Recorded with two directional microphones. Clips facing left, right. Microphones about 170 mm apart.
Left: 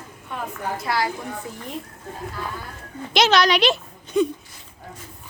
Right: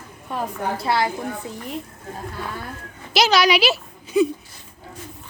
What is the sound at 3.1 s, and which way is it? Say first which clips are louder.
A woman's voice: even; 5° right (ahead or behind).